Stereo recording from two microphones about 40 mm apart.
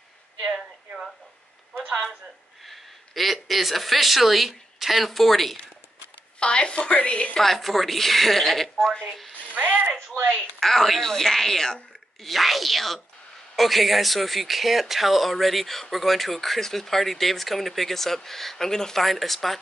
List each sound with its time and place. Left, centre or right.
2.6 s a man's voice: centre
6.4 s a woman's voice: left
7.3 s speech: centre
9.6 s speech: right
9.9 s speech: right
10.6 s speech: centre
12.3 s speech: centre